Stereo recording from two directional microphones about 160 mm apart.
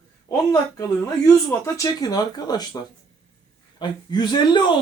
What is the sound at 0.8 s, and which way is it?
Speech, 20° left (ahead or behind).